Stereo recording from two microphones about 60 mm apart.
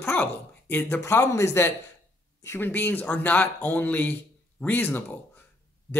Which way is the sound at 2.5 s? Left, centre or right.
Left.